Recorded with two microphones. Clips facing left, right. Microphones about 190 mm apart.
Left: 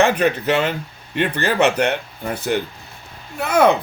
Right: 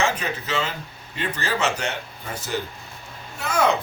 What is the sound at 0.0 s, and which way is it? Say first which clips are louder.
Speech: left 9 dB; 60° left (ahead or behind).